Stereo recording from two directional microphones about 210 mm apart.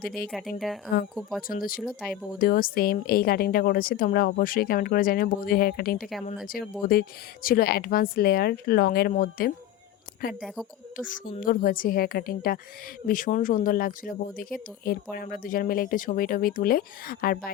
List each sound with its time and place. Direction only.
0.0 s a woman's voice: 45° left (ahead or behind)
0.3 s speech: centre (ahead or behind)
1.4 s a woman's voice: 45° left (ahead or behind)
1.8 s speech: centre (ahead or behind)
2.4 s a woman's voice: 45° left (ahead or behind)